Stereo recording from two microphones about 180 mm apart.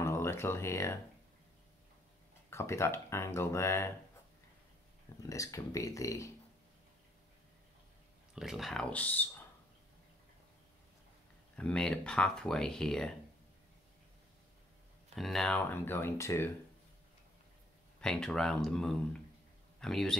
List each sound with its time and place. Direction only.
0.0 s a sound: 15° left (ahead or behind)
2.5 s speech: 15° left (ahead or behind)
5.2 s speech: 20° left (ahead or behind)
8.4 s speech: centre (ahead or behind)
11.5 s speech: 5° left (ahead or behind)
15.1 s speech: centre (ahead or behind)
18.0 s speech: 5° left (ahead or behind)